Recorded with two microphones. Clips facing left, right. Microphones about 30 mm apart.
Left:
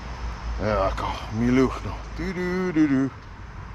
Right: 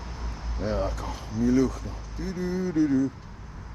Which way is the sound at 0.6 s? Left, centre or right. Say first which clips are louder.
Left 6 dB; left.